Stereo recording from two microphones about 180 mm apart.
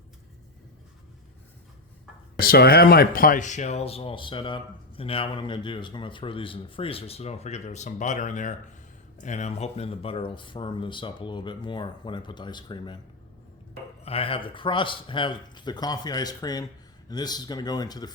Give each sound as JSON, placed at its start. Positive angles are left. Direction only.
{"t": 2.4, "sound": "speech", "side_deg": 60}
{"t": 14.0, "sound": "speech", "side_deg": 35}